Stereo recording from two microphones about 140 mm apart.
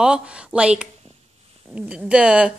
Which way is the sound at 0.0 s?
5° right (ahead or behind).